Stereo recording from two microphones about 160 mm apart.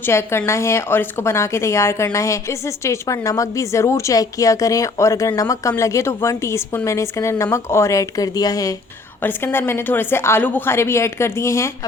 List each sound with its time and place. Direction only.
0.0 s a woman's voice: 15° left (ahead or behind)